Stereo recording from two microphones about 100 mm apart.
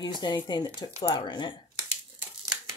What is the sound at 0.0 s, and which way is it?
Speech, 45° left (ahead or behind).